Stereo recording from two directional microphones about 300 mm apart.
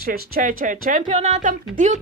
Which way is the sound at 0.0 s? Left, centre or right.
Right.